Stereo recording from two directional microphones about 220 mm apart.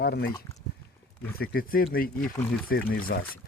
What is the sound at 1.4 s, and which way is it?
Speech, 45° left (ahead or behind).